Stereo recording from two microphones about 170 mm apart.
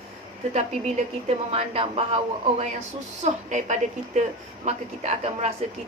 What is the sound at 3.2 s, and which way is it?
A woman's voice, 45° right (ahead or behind).